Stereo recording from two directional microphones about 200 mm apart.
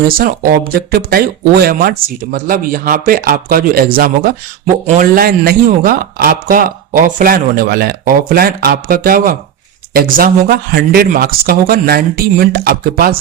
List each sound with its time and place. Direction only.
0.7 s speech: 50° right (ahead or behind)